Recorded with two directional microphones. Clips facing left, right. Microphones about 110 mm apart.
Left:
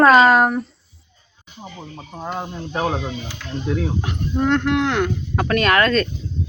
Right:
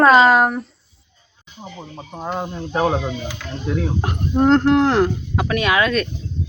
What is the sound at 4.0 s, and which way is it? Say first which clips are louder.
Speech: right 4 dB; 40° right (ahead or behind).